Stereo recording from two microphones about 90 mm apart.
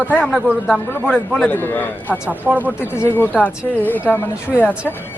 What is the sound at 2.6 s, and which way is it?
Speech, 25° left (ahead or behind).